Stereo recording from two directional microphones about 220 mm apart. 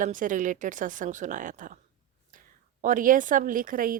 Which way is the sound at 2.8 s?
35° right (ahead or behind).